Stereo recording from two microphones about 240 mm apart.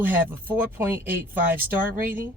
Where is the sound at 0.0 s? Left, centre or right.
Centre.